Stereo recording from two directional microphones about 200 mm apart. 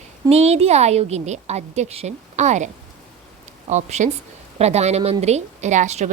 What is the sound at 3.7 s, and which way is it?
A woman's voice, 35° right (ahead or behind).